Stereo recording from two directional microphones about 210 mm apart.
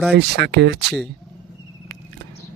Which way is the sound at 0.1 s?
50° right (ahead or behind).